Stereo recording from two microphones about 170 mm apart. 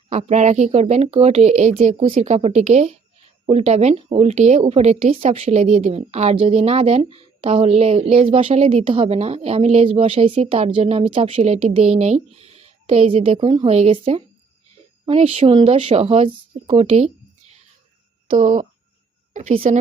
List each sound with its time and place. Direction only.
0.1 s a woman's voice: 40° right (ahead or behind)
18.3 s speech: 50° right (ahead or behind)
19.3 s a sound: 45° right (ahead or behind)